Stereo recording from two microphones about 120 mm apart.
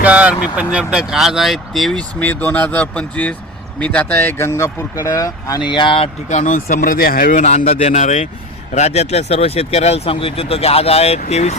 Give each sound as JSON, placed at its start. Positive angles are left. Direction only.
{"t": 0.0, "sound": "speech", "side_deg": -10}
{"t": 6.2, "sound": "speech", "side_deg": 85}